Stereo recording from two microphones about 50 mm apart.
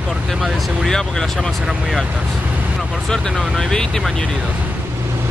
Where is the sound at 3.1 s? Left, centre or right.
Centre.